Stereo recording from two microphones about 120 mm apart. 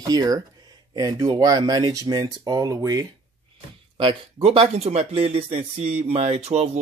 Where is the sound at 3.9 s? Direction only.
45° right (ahead or behind).